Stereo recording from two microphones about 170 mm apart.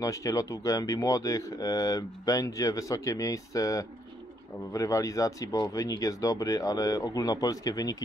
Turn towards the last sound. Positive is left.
turn(degrees=20)  # may be behind; listen again after turning